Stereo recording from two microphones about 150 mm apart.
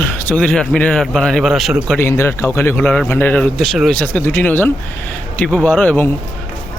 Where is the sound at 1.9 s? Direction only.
15° left (ahead or behind).